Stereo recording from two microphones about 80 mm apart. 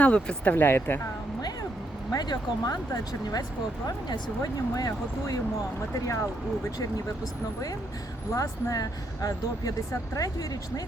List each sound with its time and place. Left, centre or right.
0.0 s speech: centre
2.1 s speech: left
8.3 s speech: left